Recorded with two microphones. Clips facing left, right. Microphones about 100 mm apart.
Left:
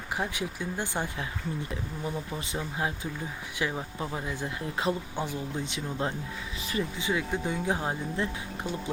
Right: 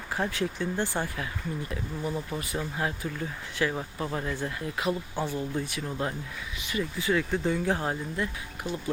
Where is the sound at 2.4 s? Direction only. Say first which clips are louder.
Right 1 dB; 20° left (ahead or behind).